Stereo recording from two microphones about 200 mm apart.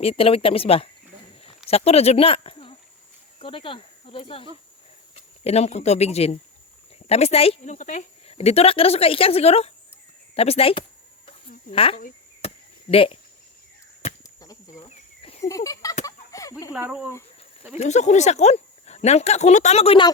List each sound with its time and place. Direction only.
0.0 s speech: 30° left (ahead or behind)
11.3 s a sound: 30° left (ahead or behind)
12.9 s speech: 30° left (ahead or behind)
14.7 s cricket: 30° left (ahead or behind)
15.4 s a sound: 15° left (ahead or behind)
16.0 s fowl: 15° left (ahead or behind)
16.7 s speech: 5° right (ahead or behind)
17.7 s speech: 35° left (ahead or behind)